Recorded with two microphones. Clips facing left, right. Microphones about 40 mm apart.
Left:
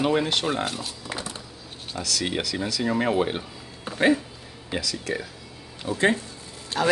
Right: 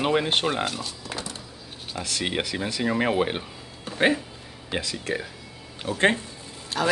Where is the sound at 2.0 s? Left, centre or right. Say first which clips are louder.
Even; right.